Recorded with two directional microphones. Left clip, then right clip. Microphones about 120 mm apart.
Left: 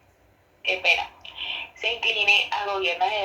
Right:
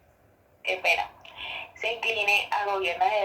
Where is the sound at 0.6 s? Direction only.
45° right (ahead or behind).